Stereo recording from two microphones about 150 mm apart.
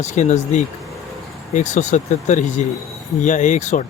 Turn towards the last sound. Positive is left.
turn(degrees=55)  # may be behind; listen again after turning